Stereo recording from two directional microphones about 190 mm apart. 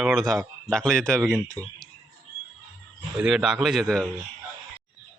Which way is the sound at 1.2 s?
10° right (ahead or behind).